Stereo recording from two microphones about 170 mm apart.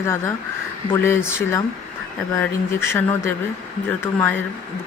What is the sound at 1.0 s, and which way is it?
Speech, 15° left (ahead or behind).